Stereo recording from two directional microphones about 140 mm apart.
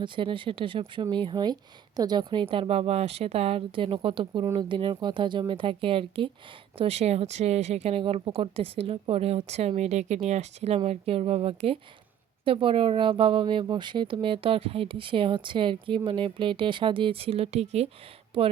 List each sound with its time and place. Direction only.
0.0 s speech: 35° right (ahead or behind)
18.3 s speech: 40° right (ahead or behind)